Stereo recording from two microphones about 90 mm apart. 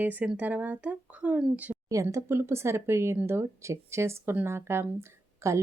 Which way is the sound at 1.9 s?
35° right (ahead or behind).